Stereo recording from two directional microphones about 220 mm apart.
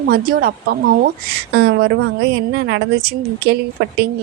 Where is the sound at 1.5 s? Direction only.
50° right (ahead or behind).